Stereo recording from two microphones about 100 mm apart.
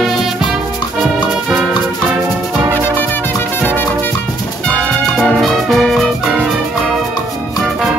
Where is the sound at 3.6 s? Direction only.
20° left (ahead or behind).